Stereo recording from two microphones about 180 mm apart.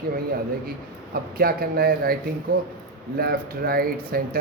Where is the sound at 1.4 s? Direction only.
55° right (ahead or behind).